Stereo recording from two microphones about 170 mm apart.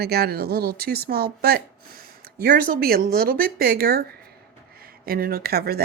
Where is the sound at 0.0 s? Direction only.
65° right (ahead or behind).